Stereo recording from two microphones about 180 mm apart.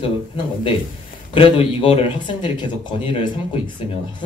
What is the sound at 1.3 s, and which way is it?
Speech, 30° left (ahead or behind).